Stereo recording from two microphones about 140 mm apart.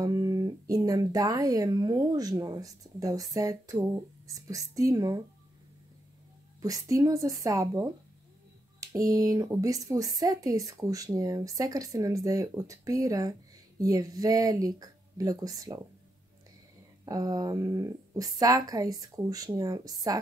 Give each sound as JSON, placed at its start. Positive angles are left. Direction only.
{"t": 0.0, "sound": "speech", "side_deg": -25}
{"t": 6.6, "sound": "speech", "side_deg": -25}
{"t": 17.0, "sound": "speech", "side_deg": -25}